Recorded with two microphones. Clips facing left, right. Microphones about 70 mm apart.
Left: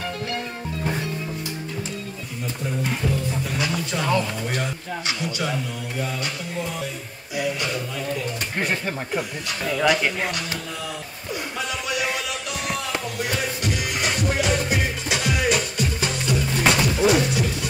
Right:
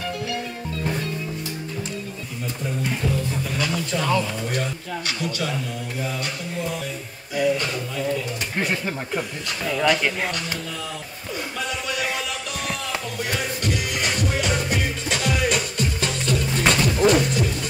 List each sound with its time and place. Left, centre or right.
0.8 s music: centre
3.4 s speech: centre
4.6 s speech: centre
8.5 s speech: centre
13.6 s music: centre